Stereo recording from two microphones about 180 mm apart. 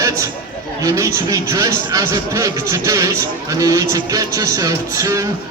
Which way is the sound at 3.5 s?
20° right (ahead or behind).